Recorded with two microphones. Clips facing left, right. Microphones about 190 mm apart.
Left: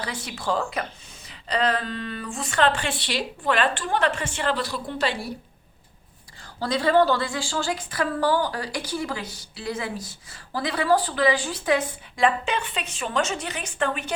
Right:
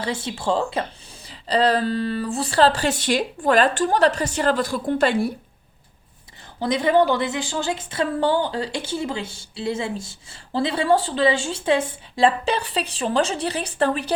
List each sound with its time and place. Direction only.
0.0 s speech: 25° right (ahead or behind); by 5.3 s 50° right (ahead or behind)
6.6 s a woman's voice: 20° right (ahead or behind); by 14.2 s 35° right (ahead or behind)